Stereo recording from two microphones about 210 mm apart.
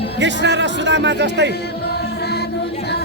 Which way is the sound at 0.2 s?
60° right (ahead or behind).